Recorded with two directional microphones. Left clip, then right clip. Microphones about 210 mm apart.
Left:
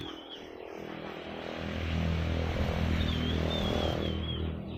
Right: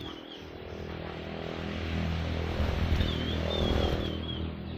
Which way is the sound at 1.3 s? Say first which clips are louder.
Even; 45° left (ahead or behind).